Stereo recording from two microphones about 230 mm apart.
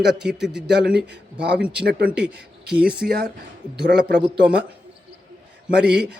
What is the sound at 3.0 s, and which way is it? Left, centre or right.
A man's voice, right.